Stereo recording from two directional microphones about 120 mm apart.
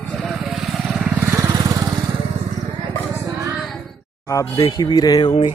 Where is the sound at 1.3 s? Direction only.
30° right (ahead or behind).